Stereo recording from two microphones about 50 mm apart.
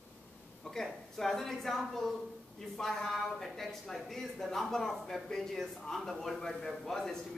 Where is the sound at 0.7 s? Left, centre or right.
Centre.